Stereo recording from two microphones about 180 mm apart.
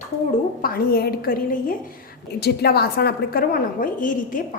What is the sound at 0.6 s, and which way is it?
A woman's voice, 55° left (ahead or behind).